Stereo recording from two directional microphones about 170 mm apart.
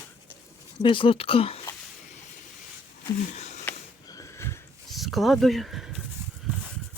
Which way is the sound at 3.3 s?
45° left (ahead or behind).